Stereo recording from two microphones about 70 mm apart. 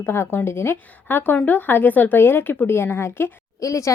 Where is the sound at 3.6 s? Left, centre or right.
Left.